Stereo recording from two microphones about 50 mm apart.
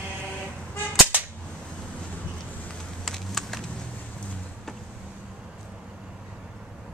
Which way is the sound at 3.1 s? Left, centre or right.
Centre.